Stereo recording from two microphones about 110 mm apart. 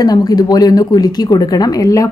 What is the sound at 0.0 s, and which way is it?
A woman's voice, 35° left (ahead or behind).